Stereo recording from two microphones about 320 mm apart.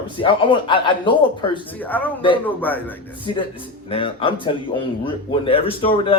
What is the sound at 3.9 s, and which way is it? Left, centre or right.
A man's voice, centre.